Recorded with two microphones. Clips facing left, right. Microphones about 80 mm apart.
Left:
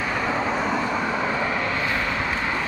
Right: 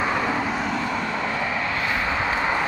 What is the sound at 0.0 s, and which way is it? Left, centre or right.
Vehicle, centre.